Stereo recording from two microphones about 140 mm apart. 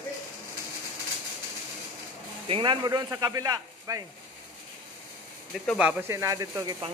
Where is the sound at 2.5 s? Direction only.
35° right (ahead or behind).